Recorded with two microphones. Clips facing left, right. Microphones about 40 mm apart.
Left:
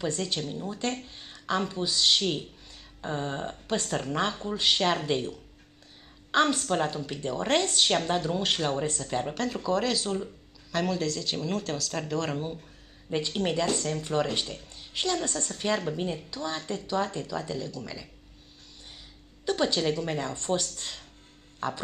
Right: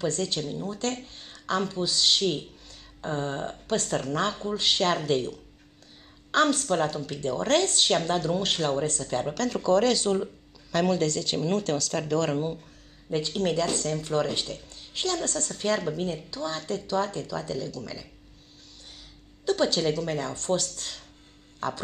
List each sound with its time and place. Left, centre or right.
0.0 s speech: centre
3.6 s speech: centre
6.3 s speech: centre
7.8 s speech: centre
9.6 s speech: centre
10.0 s speech: centre
13.1 s speech: centre
19.4 s a woman's voice: left